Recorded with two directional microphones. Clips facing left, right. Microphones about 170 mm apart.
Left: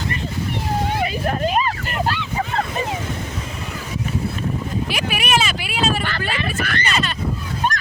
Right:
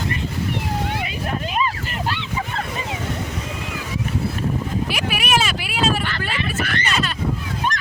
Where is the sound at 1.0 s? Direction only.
40° left (ahead or behind).